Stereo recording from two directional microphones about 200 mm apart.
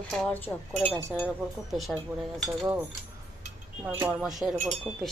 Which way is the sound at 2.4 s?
Centre (ahead or behind).